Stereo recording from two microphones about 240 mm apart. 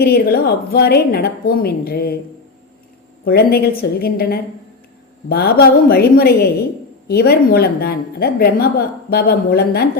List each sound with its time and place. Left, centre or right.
0.0 s a woman's voice: left
3.2 s a woman's voice: left